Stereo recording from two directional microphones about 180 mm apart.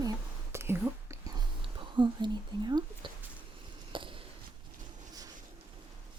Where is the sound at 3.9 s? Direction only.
30° right (ahead or behind).